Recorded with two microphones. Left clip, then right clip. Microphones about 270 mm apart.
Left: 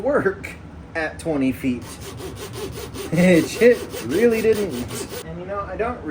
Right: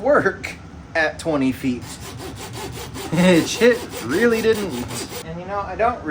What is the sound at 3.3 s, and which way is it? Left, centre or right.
Speech, centre.